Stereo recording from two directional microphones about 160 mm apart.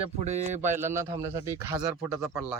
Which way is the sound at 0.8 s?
15° right (ahead or behind).